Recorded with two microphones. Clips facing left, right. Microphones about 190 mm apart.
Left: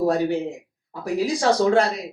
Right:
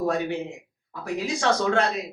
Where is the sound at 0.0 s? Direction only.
35° left (ahead or behind).